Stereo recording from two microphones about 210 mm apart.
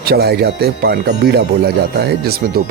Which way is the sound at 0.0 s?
50° right (ahead or behind).